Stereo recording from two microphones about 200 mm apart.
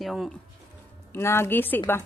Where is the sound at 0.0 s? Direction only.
Centre (ahead or behind).